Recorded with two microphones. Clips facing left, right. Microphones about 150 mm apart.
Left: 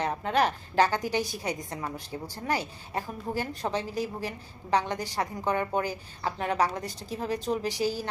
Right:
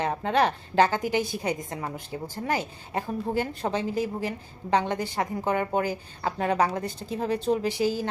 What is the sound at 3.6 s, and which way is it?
Speech, 40° right (ahead or behind).